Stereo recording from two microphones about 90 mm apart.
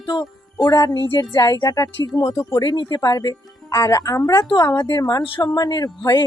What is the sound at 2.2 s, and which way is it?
Speech, 25° left (ahead or behind).